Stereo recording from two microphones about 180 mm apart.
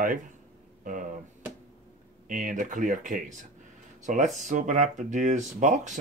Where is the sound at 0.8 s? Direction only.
45° right (ahead or behind).